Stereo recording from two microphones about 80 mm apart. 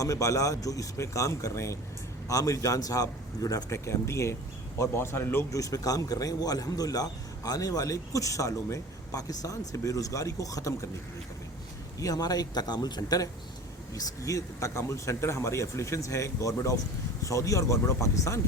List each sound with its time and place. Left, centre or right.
0.0 s a man's voice: left
5.5 s a man's voice: left
11.9 s a man's voice: left